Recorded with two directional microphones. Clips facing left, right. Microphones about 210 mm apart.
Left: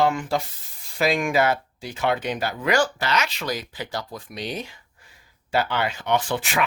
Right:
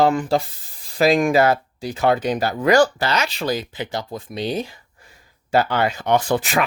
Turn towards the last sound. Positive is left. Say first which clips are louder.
# right 5 dB
turn(degrees=-40)  # may be behind; listen again after turning